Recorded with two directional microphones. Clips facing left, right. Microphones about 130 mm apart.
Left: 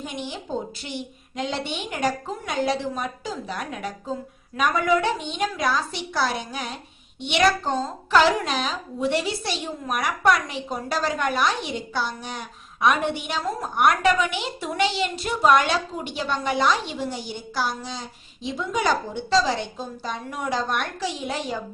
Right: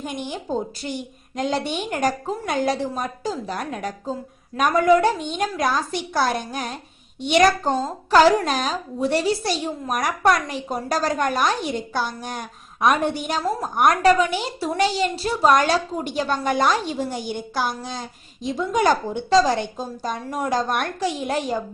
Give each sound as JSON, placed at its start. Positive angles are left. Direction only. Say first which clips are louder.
{"t": 0.0, "sound": "a woman's voice", "louder": "right 3 dB", "side_deg": -50}